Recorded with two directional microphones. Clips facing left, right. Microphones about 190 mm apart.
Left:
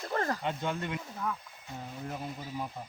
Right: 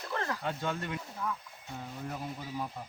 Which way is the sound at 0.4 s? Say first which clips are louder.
Left 1 dB; 20° left (ahead or behind).